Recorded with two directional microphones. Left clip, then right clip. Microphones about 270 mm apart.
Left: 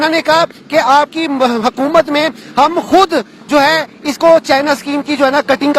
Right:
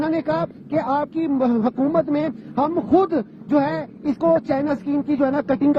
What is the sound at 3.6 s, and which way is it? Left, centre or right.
A man's voice, centre.